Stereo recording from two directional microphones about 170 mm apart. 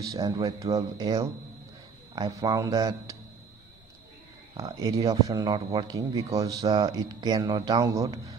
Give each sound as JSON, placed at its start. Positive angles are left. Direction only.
{"t": 0.1, "sound": "speech", "side_deg": -20}
{"t": 4.6, "sound": "speech", "side_deg": -20}